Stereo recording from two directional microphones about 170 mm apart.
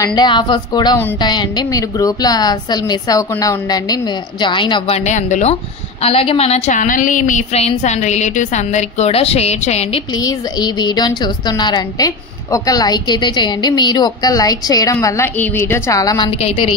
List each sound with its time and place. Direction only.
0.0 s a woman's voice: 25° left (ahead or behind); by 10.0 s 40° left (ahead or behind)
10.1 s a woman's voice: 25° left (ahead or behind)
16.3 s a woman's voice: 35° left (ahead or behind)